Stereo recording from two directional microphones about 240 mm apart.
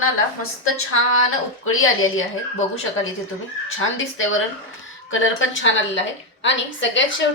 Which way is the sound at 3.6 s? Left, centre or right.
Left.